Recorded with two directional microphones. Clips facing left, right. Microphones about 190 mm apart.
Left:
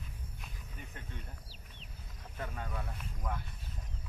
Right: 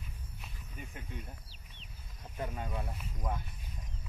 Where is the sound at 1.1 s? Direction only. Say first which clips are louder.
Right 5 dB; 10° right (ahead or behind).